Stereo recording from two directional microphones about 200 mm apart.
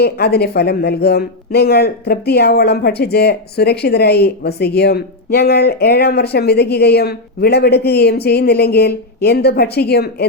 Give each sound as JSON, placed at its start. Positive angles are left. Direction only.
{"t": 0.0, "sound": "speech", "side_deg": 55}